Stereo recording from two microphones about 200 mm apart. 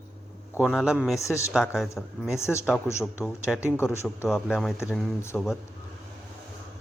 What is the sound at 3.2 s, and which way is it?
Speech, 5° right (ahead or behind).